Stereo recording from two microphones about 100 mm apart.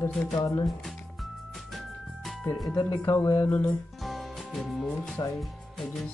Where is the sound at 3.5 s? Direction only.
15° left (ahead or behind).